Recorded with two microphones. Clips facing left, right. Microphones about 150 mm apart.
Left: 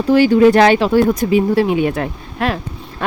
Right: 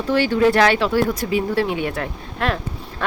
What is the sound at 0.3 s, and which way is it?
Speech, 20° left (ahead or behind).